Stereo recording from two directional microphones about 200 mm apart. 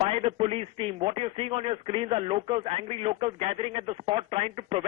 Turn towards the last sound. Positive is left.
turn(degrees=-30)  # may be behind; listen again after turning